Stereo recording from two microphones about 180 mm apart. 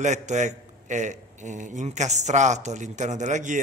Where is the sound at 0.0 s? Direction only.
40° right (ahead or behind).